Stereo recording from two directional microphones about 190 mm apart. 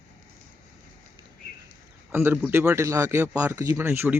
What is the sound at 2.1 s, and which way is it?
A man's voice, 10° right (ahead or behind).